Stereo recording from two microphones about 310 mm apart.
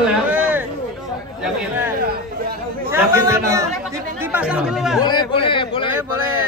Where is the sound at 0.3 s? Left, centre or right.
Centre.